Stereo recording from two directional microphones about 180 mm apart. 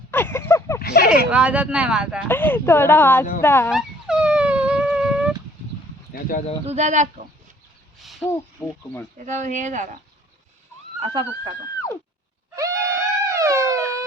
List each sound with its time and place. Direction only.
0.1 s a sound: 10° left (ahead or behind)
0.8 s a sound: 60° left (ahead or behind)
1.3 s speech: 5° right (ahead or behind)
2.2 s speech: 10° left (ahead or behind)
3.7 s dog: centre (ahead or behind)
6.7 s speech: 40° right (ahead or behind)
8.2 s speech: 15° left (ahead or behind)
9.1 s speech: 40° right (ahead or behind)
11.0 s speech: 25° right (ahead or behind)
12.5 s wail: 20° right (ahead or behind)